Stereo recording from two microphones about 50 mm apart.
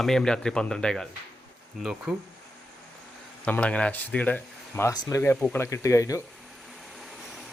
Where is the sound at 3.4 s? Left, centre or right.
Left.